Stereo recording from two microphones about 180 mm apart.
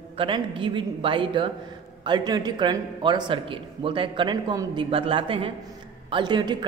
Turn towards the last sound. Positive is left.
turn(degrees=-25)  # may be behind; listen again after turning